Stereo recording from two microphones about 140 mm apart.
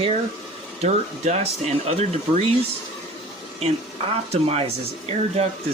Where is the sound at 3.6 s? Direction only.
50° right (ahead or behind).